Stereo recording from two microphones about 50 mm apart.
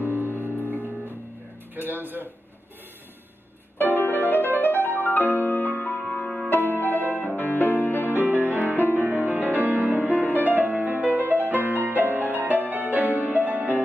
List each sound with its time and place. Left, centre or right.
0.0 s music: right
1.8 s a man's voice: right
3.7 s music: left
5.9 s music: centre
6.5 s music: left
8.1 s music: right